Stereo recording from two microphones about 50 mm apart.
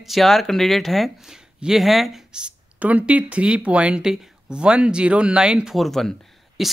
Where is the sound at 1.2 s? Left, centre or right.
Centre.